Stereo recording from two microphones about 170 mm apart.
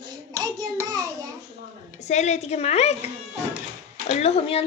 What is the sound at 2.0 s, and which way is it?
A woman's voice, 45° left (ahead or behind).